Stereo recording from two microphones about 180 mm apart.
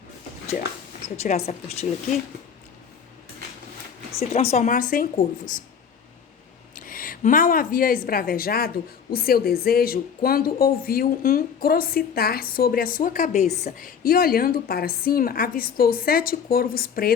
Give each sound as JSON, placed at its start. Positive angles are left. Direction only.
{"t": 1.2, "sound": "speech", "side_deg": 35}
{"t": 4.1, "sound": "speech", "side_deg": 35}
{"t": 6.7, "sound": "a woman's voice", "side_deg": 50}